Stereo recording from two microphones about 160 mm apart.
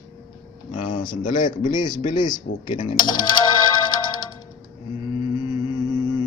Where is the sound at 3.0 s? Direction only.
25° left (ahead or behind).